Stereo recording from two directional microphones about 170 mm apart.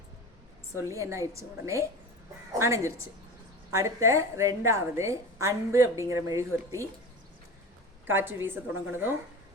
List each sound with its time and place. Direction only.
0.8 s a woman's voice: 15° right (ahead or behind)
8.0 s a woman's voice: 15° right (ahead or behind)